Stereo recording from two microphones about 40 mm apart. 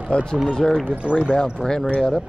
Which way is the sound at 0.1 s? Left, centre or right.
Left.